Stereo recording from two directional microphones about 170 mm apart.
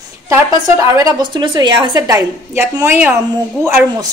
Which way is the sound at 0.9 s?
20° right (ahead or behind).